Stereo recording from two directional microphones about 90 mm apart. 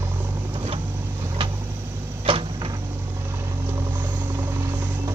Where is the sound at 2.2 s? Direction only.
90° right.